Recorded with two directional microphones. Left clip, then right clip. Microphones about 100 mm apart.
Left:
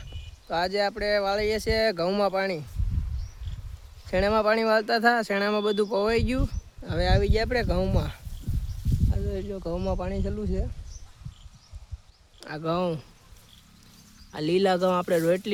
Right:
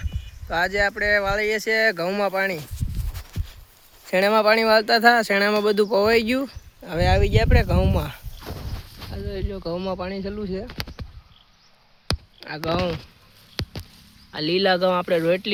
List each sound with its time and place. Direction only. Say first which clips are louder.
0.5 s speech: right 4 dB; 15° left (ahead or behind)
4.1 s speech: right 5 dB; 25° right (ahead or behind)
6.5 s speech: right 4 dB; 15° right (ahead or behind)
12.4 s speech: right 2 dB; 25° left (ahead or behind)
14.3 s speech: right 3 dB; 25° left (ahead or behind)